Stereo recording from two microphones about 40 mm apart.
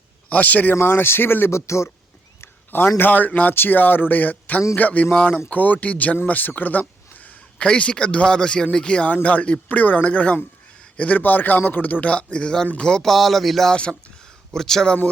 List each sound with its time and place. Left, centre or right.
0.3 s speech: left
0.8 s speech: left
2.4 s a sound: left
3.1 s speech: left
3.5 s speech: left
6.2 s speech: left
7.6 s speech: left
9.2 s a man's voice: left
11.2 s speech: left
12.8 s speech: centre
13.1 s speech: centre